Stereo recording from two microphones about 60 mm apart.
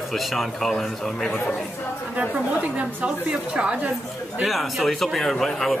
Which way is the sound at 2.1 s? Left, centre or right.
Right.